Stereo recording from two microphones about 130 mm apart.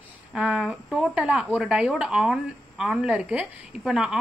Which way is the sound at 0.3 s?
5° right (ahead or behind).